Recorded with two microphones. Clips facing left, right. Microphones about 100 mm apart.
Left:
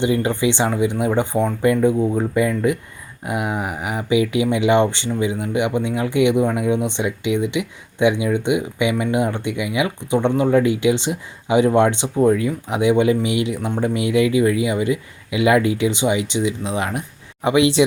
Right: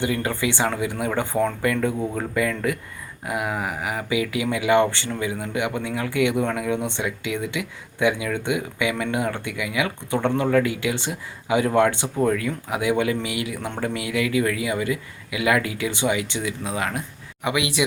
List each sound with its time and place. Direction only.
0.0 s speech: 20° left (ahead or behind)